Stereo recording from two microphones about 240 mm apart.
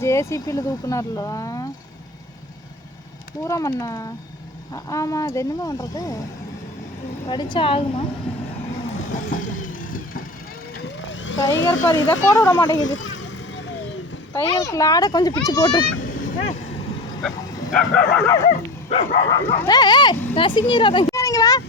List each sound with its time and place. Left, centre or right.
0.0 s speech: centre
3.4 s speech: centre
7.3 s a woman's voice: centre
9.1 s vehicle: left
10.8 s vehicle: left
12.0 s speech: centre
12.7 s vehicle: left
14.4 s speech: centre
16.0 s vehicle: left
17.2 s speech: centre
18.9 s speech: left